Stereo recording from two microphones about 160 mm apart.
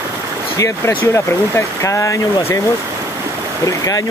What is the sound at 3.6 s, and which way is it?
Speech, 20° left (ahead or behind).